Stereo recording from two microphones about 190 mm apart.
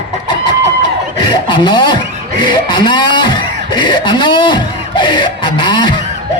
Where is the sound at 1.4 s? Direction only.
25° left (ahead or behind).